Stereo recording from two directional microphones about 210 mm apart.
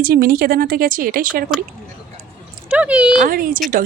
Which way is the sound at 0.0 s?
45° right (ahead or behind).